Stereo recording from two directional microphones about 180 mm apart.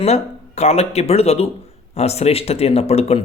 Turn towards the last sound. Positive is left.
turn(degrees=35)  # may be behind; listen again after turning